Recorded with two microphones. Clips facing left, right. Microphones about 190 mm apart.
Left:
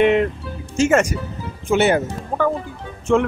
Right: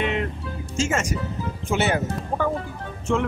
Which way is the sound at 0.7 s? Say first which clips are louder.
Left 9 dB; 60° left (ahead or behind).